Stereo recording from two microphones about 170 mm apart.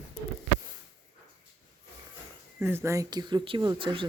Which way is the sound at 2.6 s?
15° right (ahead or behind).